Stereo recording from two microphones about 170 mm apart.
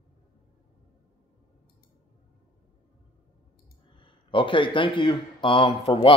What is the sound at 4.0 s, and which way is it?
Speech, 30° left (ahead or behind).